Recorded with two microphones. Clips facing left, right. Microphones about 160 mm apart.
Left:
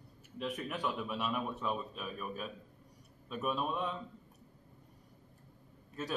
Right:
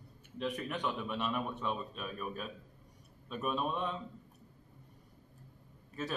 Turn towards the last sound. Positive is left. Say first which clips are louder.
# right 1 dB
turn(degrees=0)  # may be behind; listen again after turning